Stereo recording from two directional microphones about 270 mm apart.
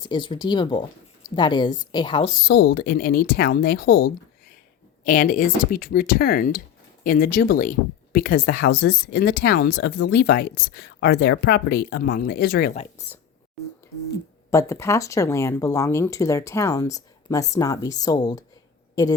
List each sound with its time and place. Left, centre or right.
0.0 s speech: centre
2.5 s speech: left
14.5 s speech: centre